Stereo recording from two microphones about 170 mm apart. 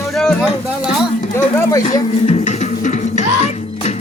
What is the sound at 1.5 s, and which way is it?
Speech, 20° left (ahead or behind).